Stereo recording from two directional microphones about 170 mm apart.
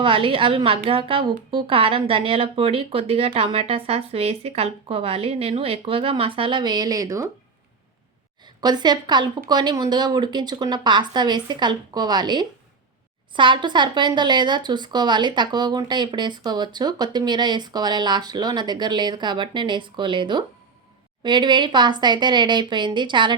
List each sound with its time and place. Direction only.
0.0 s speech: 30° right (ahead or behind)
8.6 s speech: 25° right (ahead or behind)